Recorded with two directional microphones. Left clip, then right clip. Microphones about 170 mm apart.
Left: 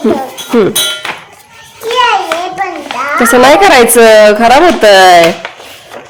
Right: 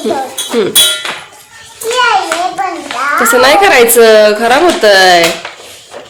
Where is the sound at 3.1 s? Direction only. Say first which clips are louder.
Left 2 dB; 40° left (ahead or behind).